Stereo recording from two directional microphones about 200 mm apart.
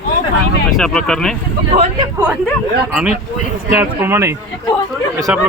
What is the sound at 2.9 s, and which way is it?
A man's voice, 5° right (ahead or behind).